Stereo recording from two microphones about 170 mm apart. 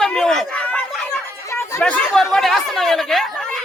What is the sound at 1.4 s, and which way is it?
Chatter, 15° left (ahead or behind).